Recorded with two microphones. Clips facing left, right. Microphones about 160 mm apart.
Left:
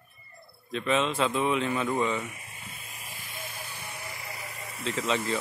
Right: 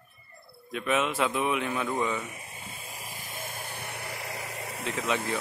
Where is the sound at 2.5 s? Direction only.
40° right (ahead or behind); by 4.8 s 80° right.